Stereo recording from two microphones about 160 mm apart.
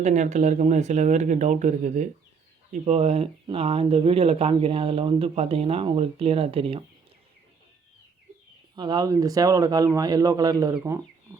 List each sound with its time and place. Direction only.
0.0 s speech: 45° right (ahead or behind)
8.7 s speech: 25° right (ahead or behind)